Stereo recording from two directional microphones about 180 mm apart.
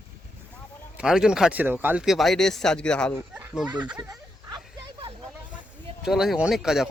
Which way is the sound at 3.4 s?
10° right (ahead or behind).